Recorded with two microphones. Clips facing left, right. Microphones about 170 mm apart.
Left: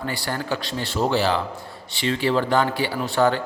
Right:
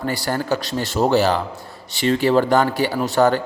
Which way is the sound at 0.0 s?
40° right (ahead or behind).